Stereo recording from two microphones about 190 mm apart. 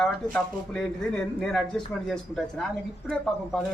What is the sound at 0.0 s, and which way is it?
Speech, 5° left (ahead or behind).